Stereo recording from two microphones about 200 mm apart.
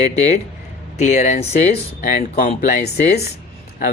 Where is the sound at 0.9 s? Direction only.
35° left (ahead or behind).